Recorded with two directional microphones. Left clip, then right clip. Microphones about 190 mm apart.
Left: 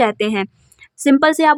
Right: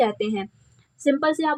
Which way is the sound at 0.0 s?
30° left (ahead or behind).